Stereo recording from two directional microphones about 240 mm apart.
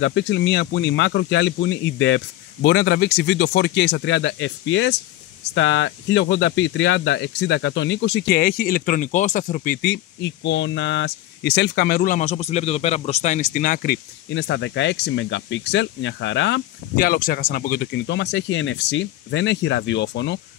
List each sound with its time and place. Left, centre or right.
0.0 s speech: left
14.3 s speech: left